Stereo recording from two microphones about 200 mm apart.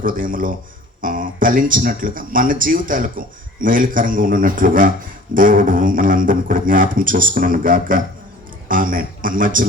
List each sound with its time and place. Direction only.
0.0 s a man's voice: 45° right (ahead or behind)